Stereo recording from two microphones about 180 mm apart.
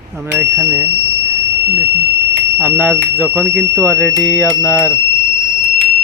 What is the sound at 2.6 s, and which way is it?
Speech, 10° right (ahead or behind).